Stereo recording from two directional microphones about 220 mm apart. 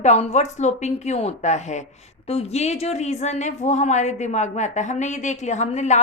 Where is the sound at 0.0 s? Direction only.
30° left (ahead or behind).